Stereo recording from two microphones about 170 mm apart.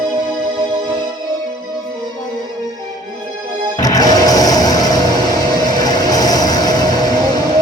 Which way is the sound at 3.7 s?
20° left (ahead or behind).